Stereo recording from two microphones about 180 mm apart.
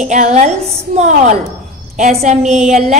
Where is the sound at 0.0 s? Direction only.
40° right (ahead or behind).